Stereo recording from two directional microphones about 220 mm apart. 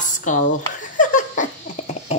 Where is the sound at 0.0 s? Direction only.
35° left (ahead or behind).